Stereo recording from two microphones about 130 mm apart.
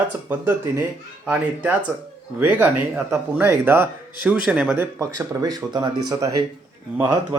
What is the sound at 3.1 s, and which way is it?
Speech, 15° right (ahead or behind).